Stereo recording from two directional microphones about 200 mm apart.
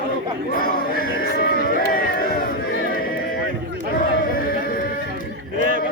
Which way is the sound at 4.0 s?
45° left (ahead or behind).